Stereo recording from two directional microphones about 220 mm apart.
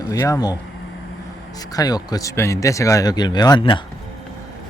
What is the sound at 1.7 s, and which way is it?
Speech, 15° left (ahead or behind).